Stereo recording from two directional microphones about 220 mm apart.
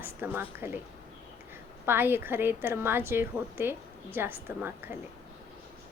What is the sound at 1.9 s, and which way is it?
A woman's voice, 10° right (ahead or behind).